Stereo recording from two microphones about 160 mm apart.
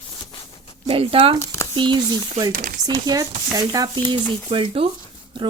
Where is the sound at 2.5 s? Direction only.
55° right (ahead or behind).